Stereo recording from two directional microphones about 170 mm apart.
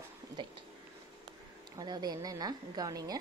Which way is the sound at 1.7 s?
25° right (ahead or behind).